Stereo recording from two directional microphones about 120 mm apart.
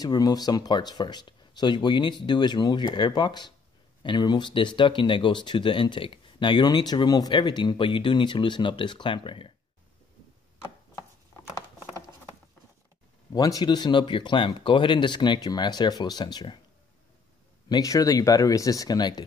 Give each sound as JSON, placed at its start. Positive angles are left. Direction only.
{"t": 0.0, "sound": "speech", "side_deg": 30}
{"t": 13.3, "sound": "speech", "side_deg": 30}
{"t": 17.6, "sound": "speech", "side_deg": 30}